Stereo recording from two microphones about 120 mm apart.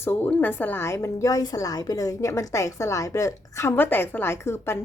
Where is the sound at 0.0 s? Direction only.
15° left (ahead or behind).